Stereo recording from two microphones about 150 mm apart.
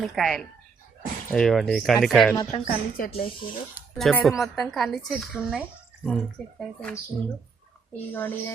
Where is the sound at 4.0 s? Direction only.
Centre (ahead or behind).